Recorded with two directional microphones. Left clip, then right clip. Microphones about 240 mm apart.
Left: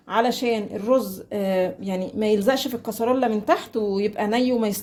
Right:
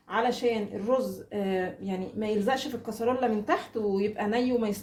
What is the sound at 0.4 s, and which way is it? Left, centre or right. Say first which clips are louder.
Speech: left 4 dB; left.